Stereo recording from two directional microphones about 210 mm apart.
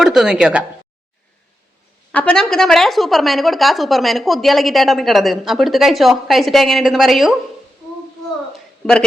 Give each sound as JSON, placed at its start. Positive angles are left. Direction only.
{"t": 0.0, "sound": "a woman's voice", "side_deg": 0}
{"t": 2.1, "sound": "a woman's voice", "side_deg": 5}